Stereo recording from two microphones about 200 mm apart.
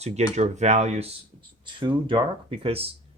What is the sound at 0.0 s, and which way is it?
Speech, 35° right (ahead or behind).